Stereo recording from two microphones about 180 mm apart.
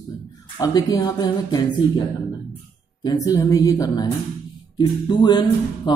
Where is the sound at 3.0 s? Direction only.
20° left (ahead or behind).